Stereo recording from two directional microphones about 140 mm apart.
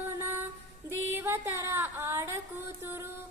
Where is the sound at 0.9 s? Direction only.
15° right (ahead or behind).